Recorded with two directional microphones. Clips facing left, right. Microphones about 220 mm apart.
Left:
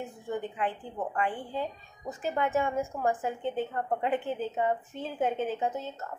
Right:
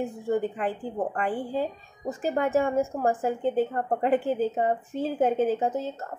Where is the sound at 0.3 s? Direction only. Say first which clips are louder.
Right 5 dB; 40° right (ahead or behind).